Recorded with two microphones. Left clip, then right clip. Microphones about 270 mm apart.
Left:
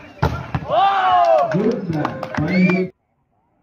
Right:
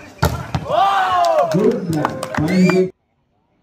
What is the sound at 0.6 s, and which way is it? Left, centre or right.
Speech, centre.